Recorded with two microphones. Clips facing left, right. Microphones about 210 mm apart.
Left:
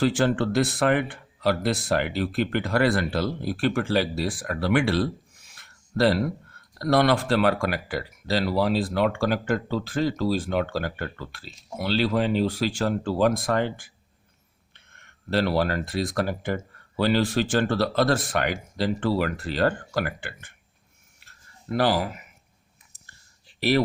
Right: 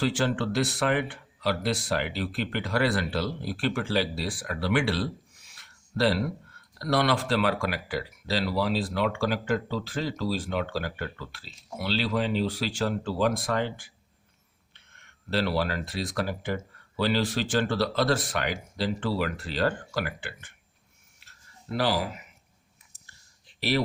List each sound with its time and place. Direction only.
0.0 s speech: 50° left (ahead or behind)
21.7 s speech: 50° left (ahead or behind)
23.6 s speech: 50° left (ahead or behind)